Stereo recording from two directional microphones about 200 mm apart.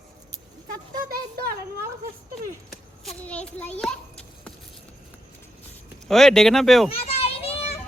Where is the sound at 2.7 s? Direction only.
Centre (ahead or behind).